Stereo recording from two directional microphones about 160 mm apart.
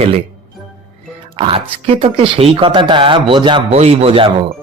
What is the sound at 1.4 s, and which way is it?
Speech, 35° right (ahead or behind).